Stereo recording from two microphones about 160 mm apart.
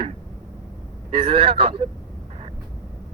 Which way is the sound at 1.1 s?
35° right (ahead or behind).